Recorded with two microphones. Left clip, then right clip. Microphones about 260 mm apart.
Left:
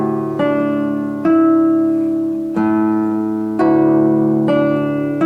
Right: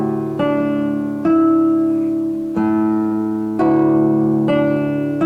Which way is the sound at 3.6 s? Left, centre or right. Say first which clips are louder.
Left 2 dB; centre.